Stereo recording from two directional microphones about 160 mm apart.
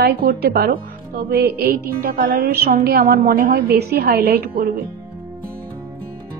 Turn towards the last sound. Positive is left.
turn(degrees=-75)  # may be behind; listen again after turning